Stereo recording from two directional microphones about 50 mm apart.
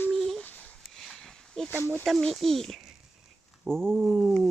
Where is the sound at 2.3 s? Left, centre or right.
Centre.